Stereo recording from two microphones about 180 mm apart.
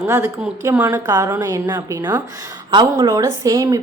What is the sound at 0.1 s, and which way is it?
Speech, 15° right (ahead or behind).